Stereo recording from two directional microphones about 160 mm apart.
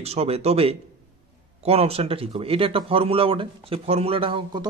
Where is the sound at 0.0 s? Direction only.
40° right (ahead or behind).